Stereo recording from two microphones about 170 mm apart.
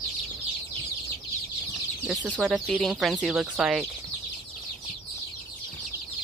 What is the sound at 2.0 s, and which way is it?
Speech, 5° right (ahead or behind).